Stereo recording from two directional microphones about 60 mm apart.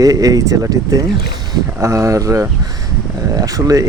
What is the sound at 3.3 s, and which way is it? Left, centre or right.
Speech, right.